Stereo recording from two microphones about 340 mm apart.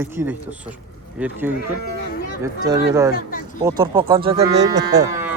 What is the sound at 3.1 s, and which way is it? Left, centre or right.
Speech, left.